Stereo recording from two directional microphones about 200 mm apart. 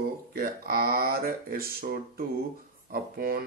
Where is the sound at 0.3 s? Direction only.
50° right (ahead or behind).